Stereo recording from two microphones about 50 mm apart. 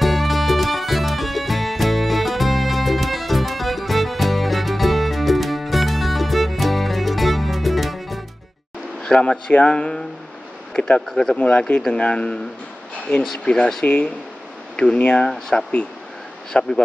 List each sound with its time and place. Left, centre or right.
0.0 s music: centre
9.0 s speech: centre
11.1 s speech: centre
11.3 s speech: left
13.8 s speech: left